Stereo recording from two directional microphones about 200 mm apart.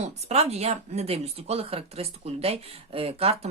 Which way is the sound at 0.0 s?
35° right (ahead or behind).